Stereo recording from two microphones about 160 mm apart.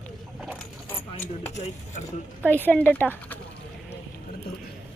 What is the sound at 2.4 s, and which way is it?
Speech, 10° left (ahead or behind).